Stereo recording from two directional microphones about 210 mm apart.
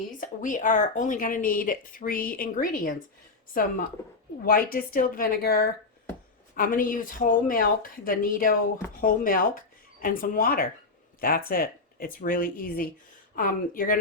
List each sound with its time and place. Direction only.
0.2 s speech: 40° left (ahead or behind)
4.4 s speech: 40° left (ahead or behind)